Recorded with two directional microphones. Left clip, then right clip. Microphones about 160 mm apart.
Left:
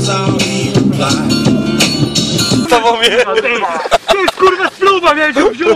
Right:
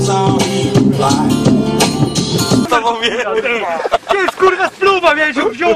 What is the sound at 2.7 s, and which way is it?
Music, 45° left (ahead or behind).